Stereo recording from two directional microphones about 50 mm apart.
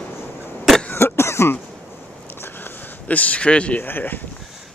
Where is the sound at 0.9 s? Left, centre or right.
Left.